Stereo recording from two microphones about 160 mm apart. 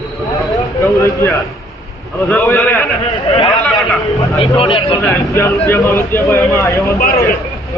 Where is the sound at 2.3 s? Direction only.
10° left (ahead or behind).